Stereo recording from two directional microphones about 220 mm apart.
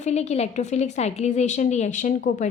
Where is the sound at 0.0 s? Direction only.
30° left (ahead or behind).